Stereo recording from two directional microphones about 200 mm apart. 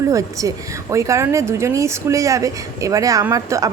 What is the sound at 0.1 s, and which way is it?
A woman's voice, 15° right (ahead or behind).